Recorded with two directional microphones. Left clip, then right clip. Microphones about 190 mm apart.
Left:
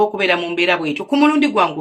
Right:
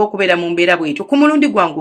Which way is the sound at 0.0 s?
25° right (ahead or behind).